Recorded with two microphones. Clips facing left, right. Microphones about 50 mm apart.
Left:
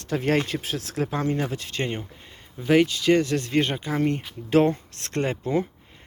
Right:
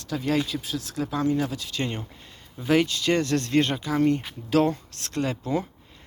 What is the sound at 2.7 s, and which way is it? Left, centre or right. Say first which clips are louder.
Speech: left 3 dB; centre.